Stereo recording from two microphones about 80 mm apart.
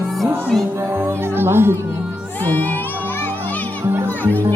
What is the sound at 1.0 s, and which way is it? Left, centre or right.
Speech, right.